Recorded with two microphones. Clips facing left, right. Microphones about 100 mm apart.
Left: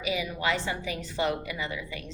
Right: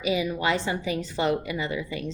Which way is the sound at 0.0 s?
25° right (ahead or behind).